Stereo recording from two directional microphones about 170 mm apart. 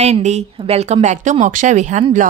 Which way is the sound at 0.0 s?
40° right (ahead or behind).